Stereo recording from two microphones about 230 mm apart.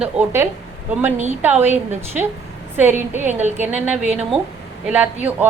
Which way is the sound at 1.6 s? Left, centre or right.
Right.